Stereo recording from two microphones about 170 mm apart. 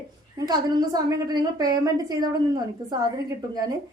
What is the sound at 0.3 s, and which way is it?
Speech, 25° right (ahead or behind).